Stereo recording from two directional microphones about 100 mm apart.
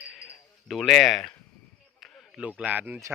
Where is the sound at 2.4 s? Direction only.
10° right (ahead or behind).